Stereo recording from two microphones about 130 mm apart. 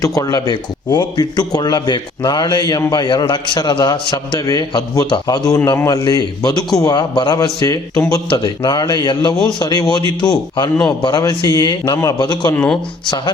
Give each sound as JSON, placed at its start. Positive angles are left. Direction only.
{"t": 0.0, "sound": "a man's voice", "side_deg": 30}
{"t": 12.5, "sound": "speech", "side_deg": 10}